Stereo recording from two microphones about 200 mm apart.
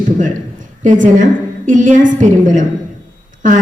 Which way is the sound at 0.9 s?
40° right (ahead or behind).